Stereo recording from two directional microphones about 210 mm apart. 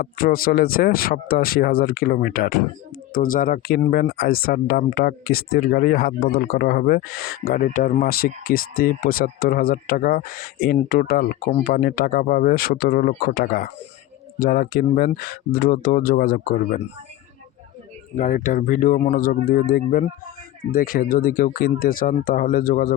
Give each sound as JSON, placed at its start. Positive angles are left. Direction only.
{"t": 0.0, "sound": "speech", "side_deg": 45}
{"t": 18.1, "sound": "speech", "side_deg": 35}